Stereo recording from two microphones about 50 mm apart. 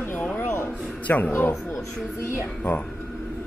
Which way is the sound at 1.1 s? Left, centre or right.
Left.